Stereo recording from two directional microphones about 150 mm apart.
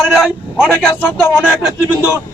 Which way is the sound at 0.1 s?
5° right (ahead or behind).